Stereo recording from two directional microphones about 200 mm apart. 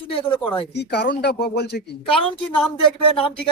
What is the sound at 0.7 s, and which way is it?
Speech, 55° left (ahead or behind).